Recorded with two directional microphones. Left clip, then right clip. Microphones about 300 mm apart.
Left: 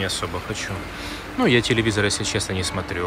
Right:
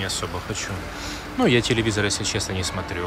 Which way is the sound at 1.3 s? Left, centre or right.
Centre.